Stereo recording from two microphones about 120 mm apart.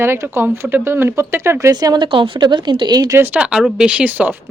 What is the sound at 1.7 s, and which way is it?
Speech, 35° right (ahead or behind).